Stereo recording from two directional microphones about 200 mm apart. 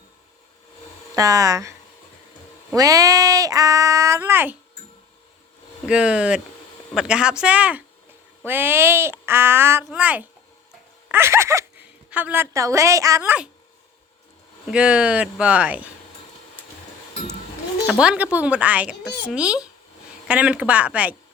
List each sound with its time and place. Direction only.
1.1 s speech: 15° right (ahead or behind)
2.7 s speech: 15° right (ahead or behind)
5.8 s a woman's voice: 5° right (ahead or behind)
14.7 s speech: 5° right (ahead or behind)
18.0 s speech: 5° right (ahead or behind)